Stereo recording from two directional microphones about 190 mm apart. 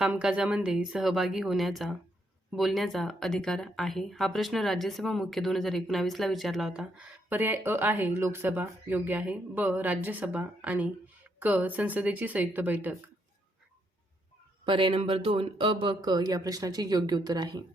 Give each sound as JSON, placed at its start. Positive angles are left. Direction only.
{"t": 0.0, "sound": "a woman's voice", "side_deg": -5}
{"t": 14.6, "sound": "speech", "side_deg": -25}